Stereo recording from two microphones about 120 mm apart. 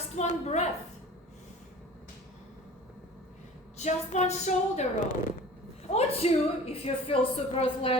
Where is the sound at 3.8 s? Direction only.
75° left (ahead or behind).